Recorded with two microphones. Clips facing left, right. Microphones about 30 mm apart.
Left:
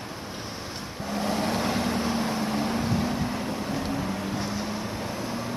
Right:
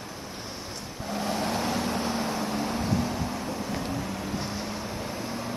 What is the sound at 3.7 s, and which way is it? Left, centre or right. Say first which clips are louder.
Vehicle: left 3 dB; centre.